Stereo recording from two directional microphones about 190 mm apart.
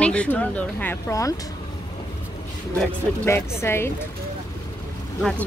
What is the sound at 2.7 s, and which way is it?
Speech, 10° left (ahead or behind).